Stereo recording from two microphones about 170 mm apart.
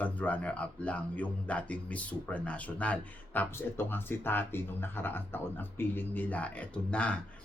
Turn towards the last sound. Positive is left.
turn(degrees=5)  # may be behind; listen again after turning